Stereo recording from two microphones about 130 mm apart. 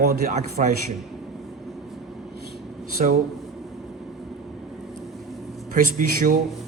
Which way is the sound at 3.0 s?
65° right (ahead or behind).